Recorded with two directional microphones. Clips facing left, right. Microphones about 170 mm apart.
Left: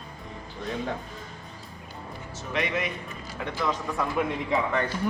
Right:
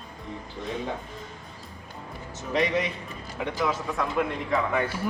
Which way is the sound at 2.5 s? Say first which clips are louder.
Right 4 dB; 35° right (ahead or behind).